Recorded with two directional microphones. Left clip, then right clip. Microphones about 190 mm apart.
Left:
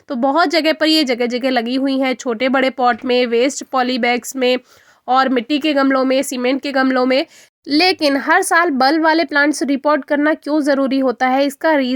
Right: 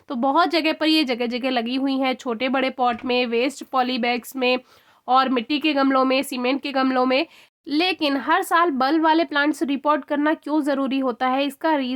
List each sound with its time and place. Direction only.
0.1 s speech: 15° left (ahead or behind)